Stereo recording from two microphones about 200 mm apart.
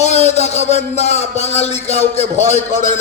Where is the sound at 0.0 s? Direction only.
35° left (ahead or behind).